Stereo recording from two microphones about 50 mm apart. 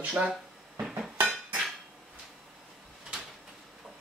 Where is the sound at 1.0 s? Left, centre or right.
Right.